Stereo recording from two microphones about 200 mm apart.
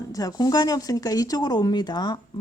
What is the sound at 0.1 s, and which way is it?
Speech, 20° left (ahead or behind).